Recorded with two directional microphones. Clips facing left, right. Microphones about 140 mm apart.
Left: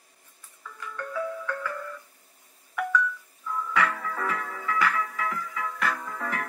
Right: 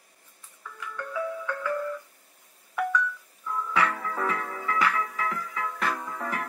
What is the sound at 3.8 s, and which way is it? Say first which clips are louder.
Music: right 1 dB; 20° right (ahead or behind).